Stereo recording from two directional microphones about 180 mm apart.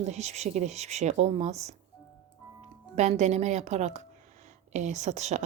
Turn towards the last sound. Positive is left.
turn(degrees=-40)  # may be behind; listen again after turning